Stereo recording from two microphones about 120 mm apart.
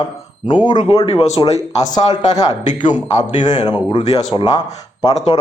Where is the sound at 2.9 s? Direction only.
80° left.